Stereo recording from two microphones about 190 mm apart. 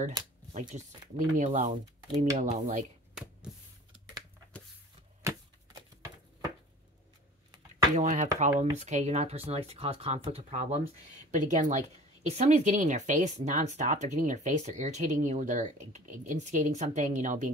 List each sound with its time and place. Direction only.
0.5 s speech: 40° right (ahead or behind)
7.9 s speech: 40° right (ahead or behind)